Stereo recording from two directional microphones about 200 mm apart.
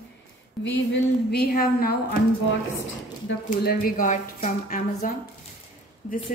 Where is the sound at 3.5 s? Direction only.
45° left (ahead or behind).